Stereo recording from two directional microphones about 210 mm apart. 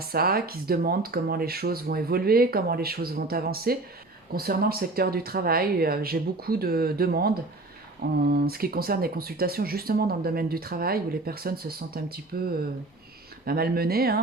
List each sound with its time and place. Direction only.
0.0 s speech: 45° right (ahead or behind)